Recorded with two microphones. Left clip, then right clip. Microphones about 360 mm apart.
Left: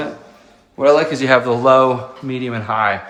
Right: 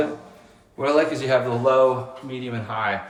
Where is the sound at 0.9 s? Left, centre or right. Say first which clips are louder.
Left 5 dB; centre.